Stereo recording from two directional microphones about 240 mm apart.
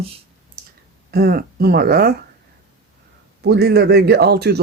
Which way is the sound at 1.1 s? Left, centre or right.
Right.